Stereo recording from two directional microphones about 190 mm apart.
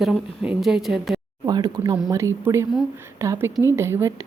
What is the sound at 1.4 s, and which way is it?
A woman's voice, 20° right (ahead or behind).